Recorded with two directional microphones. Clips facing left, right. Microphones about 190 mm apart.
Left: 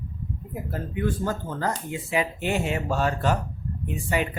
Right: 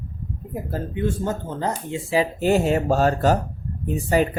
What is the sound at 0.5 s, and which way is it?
Speech, 25° right (ahead or behind).